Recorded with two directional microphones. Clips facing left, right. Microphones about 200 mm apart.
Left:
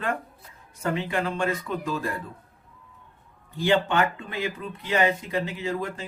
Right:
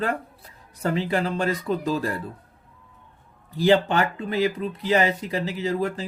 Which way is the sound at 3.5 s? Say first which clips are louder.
Right 3 dB; 35° right (ahead or behind).